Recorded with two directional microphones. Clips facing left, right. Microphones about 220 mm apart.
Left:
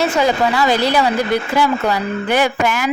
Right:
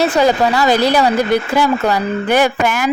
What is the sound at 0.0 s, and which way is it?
Speech, 35° right (ahead or behind).